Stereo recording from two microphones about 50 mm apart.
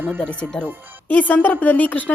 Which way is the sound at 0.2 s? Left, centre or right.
Centre.